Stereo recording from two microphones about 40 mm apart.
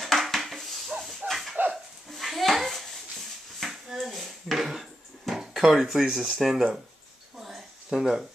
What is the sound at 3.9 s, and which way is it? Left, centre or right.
Dishes, centre.